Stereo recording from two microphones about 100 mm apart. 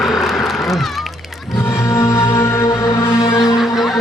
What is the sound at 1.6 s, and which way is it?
Music, 25° left (ahead or behind).